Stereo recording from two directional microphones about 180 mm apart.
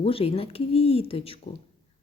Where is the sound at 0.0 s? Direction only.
30° left (ahead or behind).